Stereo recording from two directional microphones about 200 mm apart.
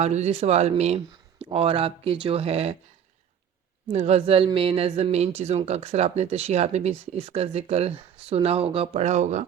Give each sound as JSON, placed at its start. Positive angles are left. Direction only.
{"t": 0.0, "sound": "speech", "side_deg": -35}
{"t": 3.9, "sound": "a woman's voice", "side_deg": -35}